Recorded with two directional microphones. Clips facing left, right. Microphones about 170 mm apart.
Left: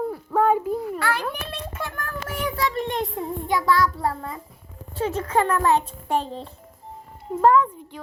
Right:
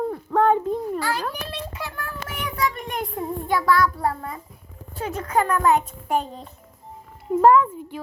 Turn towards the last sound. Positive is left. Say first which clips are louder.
# right 2 dB
turn(degrees=-5)  # may be behind; listen again after turning